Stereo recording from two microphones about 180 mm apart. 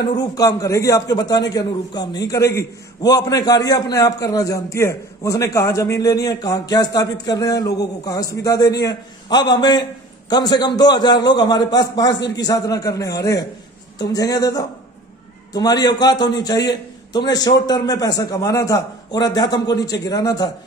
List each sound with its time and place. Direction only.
0.2 s a man's voice: 20° left (ahead or behind)